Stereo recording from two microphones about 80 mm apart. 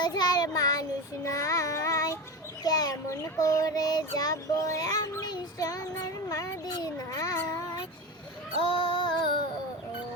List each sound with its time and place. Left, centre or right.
0.0 s child singing: left
6.2 s a sound: left
8.8 s child singing: left